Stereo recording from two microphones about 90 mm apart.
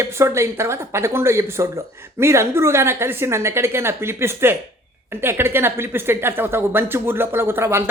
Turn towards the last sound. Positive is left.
turn(degrees=-30)  # may be behind; listen again after turning